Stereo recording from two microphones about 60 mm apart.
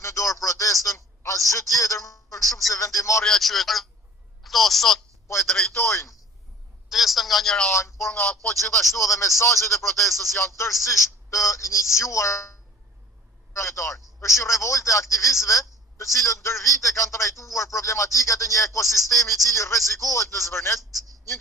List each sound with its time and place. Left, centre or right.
0.0 s a sound: left
2.7 s speech: left
3.2 s a woman's voice: centre
5.7 s speech: left
6.9 s a woman's voice: centre
7.7 s speech: left
8.2 s speech: left
9.0 s speech: left